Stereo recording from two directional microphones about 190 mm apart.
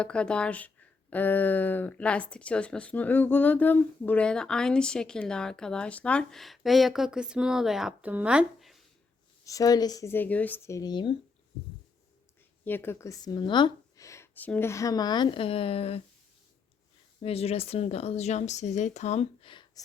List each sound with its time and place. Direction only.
0.0 s speech: 5° left (ahead or behind)
9.4 s speech: 15° left (ahead or behind)
12.6 s speech: 10° left (ahead or behind); by 16.0 s 30° left (ahead or behind)
17.2 s speech: 30° left (ahead or behind)